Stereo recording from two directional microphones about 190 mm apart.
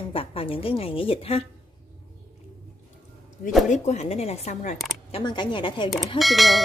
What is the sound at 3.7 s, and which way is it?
A woman's voice, 35° left (ahead or behind).